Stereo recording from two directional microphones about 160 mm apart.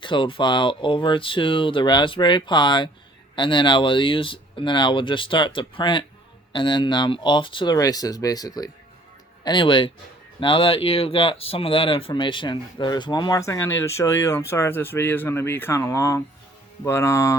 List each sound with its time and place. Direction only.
0.0 s speech: 30° left (ahead or behind)